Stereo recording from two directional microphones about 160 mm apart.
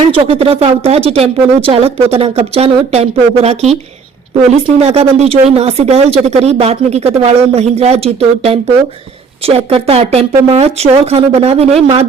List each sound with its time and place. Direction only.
0.1 s speech: 35° right (ahead or behind)
4.8 s speech: 40° right (ahead or behind)